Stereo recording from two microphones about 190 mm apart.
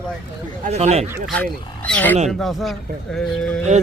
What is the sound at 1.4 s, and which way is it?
Speech, 5° left (ahead or behind).